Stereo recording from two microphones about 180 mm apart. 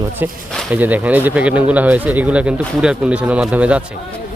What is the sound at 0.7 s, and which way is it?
Speech, 10° right (ahead or behind).